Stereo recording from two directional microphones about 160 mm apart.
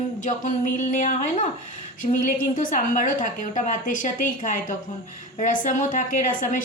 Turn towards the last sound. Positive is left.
turn(degrees=55)  # may be behind; listen again after turning